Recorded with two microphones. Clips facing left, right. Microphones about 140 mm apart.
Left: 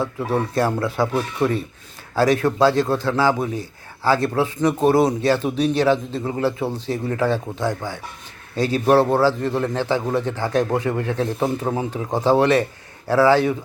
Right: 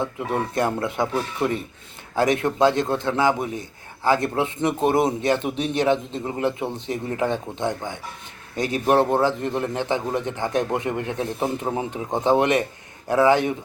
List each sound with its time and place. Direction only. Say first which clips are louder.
0.3 s a man's voice: left 3 dB; 20° right (ahead or behind)
2.1 s a man's voice: left 3 dB; 20° right (ahead or behind)